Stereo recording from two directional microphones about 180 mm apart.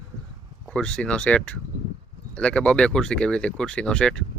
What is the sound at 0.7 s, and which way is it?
Speech, 5° left (ahead or behind).